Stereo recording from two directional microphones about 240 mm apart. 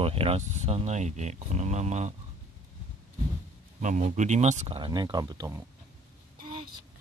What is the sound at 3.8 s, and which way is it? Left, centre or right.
Speech, right.